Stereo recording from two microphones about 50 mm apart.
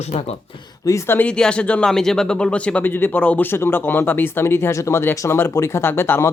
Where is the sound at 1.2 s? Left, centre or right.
Centre.